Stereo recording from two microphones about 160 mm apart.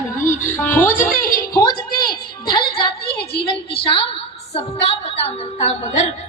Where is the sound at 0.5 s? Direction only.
10° left (ahead or behind).